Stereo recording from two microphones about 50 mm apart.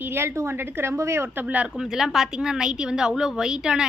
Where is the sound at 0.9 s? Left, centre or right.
Right.